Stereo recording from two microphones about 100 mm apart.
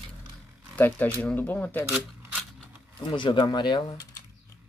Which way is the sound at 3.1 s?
55° left (ahead or behind).